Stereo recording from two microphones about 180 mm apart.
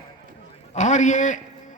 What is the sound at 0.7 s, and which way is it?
A man's voice, 40° left (ahead or behind).